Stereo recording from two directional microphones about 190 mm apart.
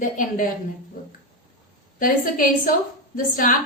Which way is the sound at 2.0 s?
45° left (ahead or behind).